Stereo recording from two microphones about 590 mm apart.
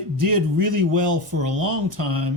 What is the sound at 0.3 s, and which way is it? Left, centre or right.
Speech, right.